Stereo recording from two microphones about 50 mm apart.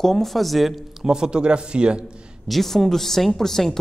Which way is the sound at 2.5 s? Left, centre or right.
Centre.